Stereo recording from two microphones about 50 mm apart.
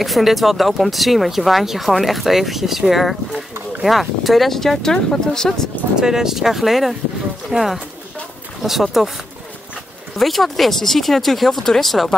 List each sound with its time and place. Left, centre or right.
0.0 s speech: centre
5.9 s speech: centre
10.1 s speech: centre